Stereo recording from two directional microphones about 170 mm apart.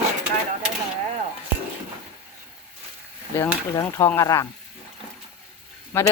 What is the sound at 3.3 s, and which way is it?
Speech, 15° left (ahead or behind).